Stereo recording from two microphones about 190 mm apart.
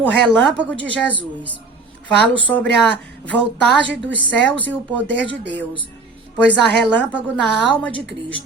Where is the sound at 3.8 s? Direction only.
70° right (ahead or behind).